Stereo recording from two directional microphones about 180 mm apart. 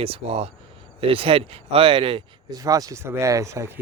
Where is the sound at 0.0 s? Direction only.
30° right (ahead or behind).